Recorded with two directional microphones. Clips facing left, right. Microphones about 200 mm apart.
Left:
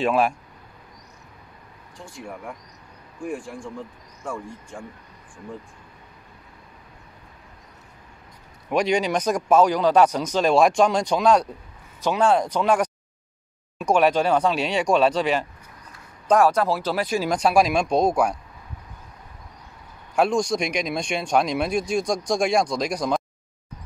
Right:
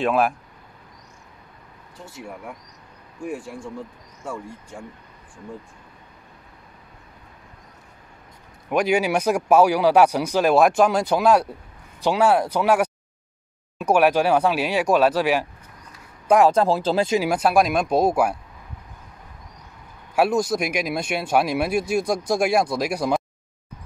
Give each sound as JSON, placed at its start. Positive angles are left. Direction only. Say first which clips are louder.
{"t": 0.0, "sound": "speech", "louder": "even", "side_deg": 0}
{"t": 2.0, "sound": "speech", "louder": "even", "side_deg": -5}
{"t": 4.2, "sound": "speech", "louder": "even", "side_deg": 0}
{"t": 8.6, "sound": "speech", "louder": "right 1 dB", "side_deg": -5}
{"t": 16.3, "sound": "speech", "louder": "right 2 dB", "side_deg": -20}
{"t": 17.2, "sound": "speech", "louder": "even", "side_deg": -5}
{"t": 20.2, "sound": "speech", "louder": "right 1 dB", "side_deg": -5}